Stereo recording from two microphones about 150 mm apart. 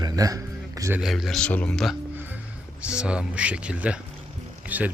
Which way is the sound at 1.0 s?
Centre (ahead or behind).